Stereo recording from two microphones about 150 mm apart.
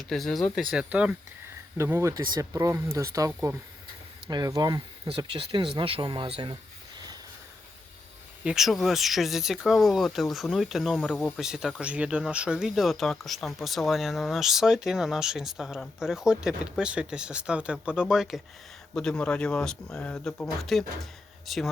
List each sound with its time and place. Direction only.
0.0 s speech: centre (ahead or behind)
1.8 s speech: 20° right (ahead or behind)
5.0 s speech: 35° right (ahead or behind)
8.4 s speech: centre (ahead or behind)